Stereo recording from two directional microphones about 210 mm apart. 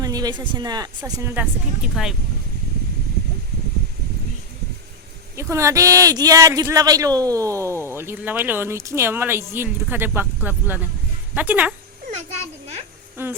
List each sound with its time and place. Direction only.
0.0 s speech: 20° right (ahead or behind); by 2.1 s 5° right (ahead or behind)
5.4 s speech: 15° right (ahead or behind)
13.2 s speech: 10° right (ahead or behind)